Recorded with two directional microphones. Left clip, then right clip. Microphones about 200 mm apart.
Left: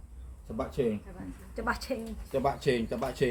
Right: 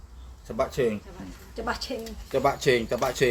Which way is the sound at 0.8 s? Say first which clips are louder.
Right 3 dB; 40° right (ahead or behind).